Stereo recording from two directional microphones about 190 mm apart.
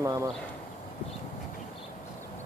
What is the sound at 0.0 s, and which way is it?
Speech, 15° right (ahead or behind).